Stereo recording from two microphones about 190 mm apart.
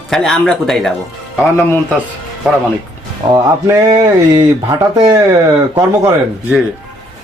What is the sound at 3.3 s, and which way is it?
Speech, 20° right (ahead or behind).